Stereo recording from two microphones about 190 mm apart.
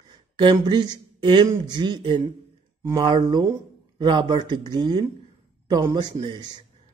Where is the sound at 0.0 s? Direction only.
25° right (ahead or behind).